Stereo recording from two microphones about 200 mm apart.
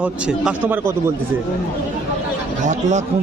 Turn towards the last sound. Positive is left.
turn(degrees=-35)  # may be behind; listen again after turning